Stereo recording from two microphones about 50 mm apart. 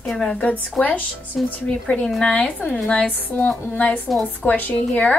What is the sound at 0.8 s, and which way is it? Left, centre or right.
Child singing, left.